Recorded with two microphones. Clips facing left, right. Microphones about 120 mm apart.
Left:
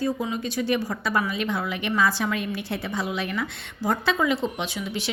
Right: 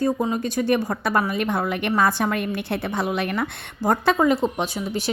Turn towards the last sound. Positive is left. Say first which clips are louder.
# right 5 dB
turn(degrees=-45)  # may be behind; listen again after turning